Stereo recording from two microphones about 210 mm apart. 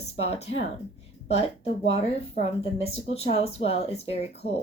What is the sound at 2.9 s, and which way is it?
Speech, 30° left (ahead or behind).